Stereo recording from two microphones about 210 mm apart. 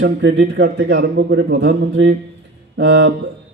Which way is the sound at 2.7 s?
55° right (ahead or behind).